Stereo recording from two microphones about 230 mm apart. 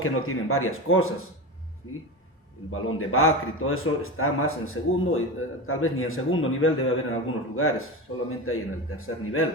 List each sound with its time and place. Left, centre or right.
0.0 s a man's voice: left
2.7 s a man's voice: left